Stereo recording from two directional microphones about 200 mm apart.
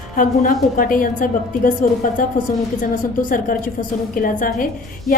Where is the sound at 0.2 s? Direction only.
45° left (ahead or behind).